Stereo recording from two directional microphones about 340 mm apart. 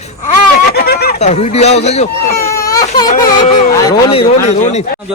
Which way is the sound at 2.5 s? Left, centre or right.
Centre.